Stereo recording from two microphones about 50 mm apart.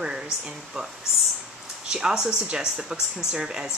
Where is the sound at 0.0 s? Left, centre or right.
Centre.